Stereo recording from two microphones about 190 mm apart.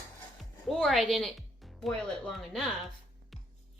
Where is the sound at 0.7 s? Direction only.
Centre (ahead or behind).